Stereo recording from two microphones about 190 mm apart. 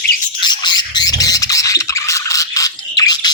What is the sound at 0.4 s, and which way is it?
Bird, 25° left (ahead or behind).